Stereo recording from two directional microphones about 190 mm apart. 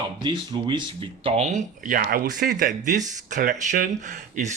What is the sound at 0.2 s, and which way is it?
Speech, 25° right (ahead or behind).